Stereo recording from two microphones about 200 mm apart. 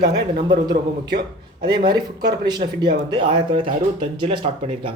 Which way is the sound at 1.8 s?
20° right (ahead or behind).